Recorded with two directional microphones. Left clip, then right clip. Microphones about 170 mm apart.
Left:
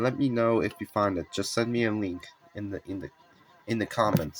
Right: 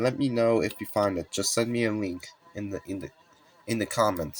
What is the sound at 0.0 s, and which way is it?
Speech, 5° left (ahead or behind).